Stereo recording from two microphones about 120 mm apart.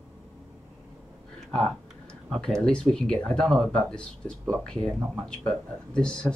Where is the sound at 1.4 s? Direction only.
5° left (ahead or behind).